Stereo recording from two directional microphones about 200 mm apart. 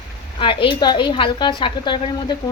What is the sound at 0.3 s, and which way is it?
Speech, 25° left (ahead or behind).